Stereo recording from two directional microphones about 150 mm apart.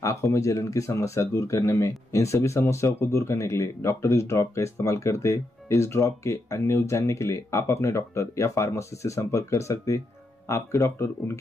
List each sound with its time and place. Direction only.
0.0 s speech: 20° left (ahead or behind)